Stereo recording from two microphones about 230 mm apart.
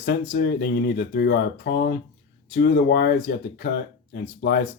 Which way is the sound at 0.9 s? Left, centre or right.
Left.